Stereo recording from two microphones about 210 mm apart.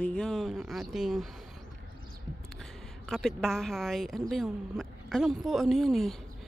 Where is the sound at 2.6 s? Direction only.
Centre (ahead or behind).